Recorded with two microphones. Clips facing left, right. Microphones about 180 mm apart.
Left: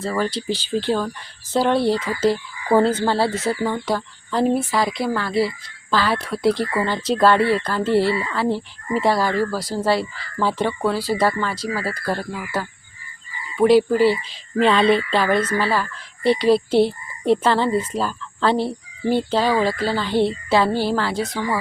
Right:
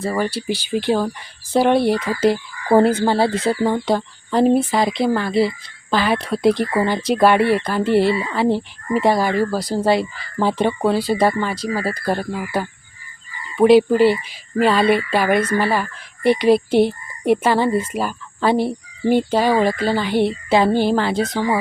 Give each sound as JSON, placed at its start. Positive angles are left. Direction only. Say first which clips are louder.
{"t": 0.0, "sound": "speech", "louder": "right 2 dB", "side_deg": -10}